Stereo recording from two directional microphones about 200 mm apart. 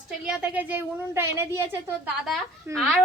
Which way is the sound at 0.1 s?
5° right (ahead or behind).